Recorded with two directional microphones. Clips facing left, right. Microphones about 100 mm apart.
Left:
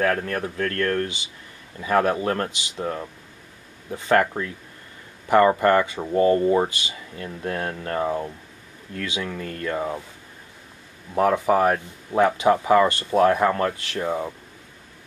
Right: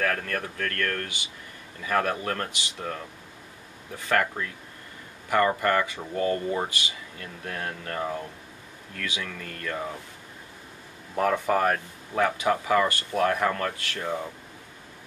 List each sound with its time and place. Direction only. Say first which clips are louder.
0.0 s speech: left 5 dB; 20° left (ahead or behind)
11.1 s speech: left 5 dB; 20° left (ahead or behind)